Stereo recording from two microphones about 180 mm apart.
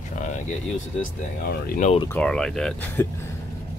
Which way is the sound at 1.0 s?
50° left (ahead or behind).